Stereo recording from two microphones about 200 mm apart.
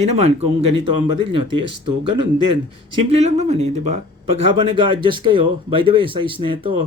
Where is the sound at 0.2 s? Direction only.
30° right (ahead or behind).